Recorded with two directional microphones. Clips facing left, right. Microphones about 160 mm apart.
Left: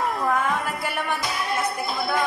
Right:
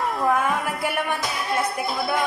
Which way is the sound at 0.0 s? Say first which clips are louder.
Right 2 dB; centre (ahead or behind).